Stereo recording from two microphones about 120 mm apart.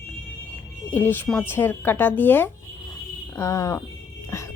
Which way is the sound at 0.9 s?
20° left (ahead or behind).